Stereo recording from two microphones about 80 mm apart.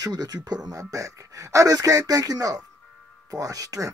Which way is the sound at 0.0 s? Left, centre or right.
Right.